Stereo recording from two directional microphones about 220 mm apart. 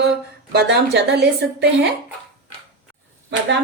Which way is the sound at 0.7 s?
50° right (ahead or behind).